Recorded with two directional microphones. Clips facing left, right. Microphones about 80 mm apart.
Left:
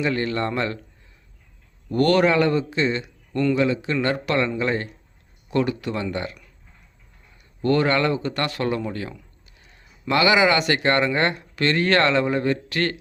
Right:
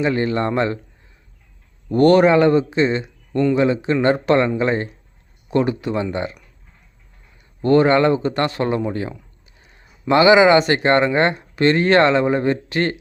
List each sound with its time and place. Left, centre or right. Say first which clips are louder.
0.0 s speech: right 4 dB; right
1.9 s speech: right 6 dB; right
7.6 s speech: right 6 dB; right